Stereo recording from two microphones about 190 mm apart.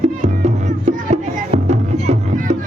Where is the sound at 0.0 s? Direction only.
35° right (ahead or behind).